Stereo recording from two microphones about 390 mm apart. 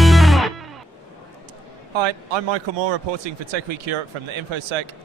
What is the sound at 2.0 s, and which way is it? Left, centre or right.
Speech, right.